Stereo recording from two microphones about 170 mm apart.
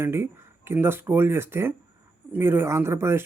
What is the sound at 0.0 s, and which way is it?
Speech, 15° right (ahead or behind).